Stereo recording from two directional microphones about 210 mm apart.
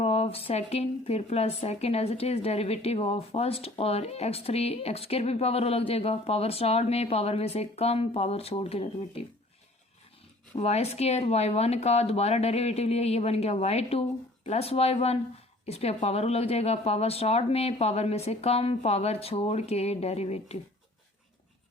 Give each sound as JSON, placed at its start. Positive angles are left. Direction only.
{"t": 0.0, "sound": "speech", "side_deg": 30}
{"t": 10.5, "sound": "speech", "side_deg": 30}